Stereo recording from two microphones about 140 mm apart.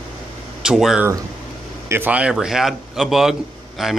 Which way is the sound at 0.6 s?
5° right (ahead or behind).